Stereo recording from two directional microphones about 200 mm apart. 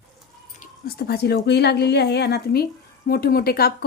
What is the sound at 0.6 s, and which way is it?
Speech, 50° left (ahead or behind).